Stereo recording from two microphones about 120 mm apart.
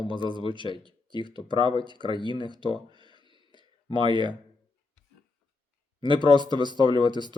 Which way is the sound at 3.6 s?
40° right (ahead or behind).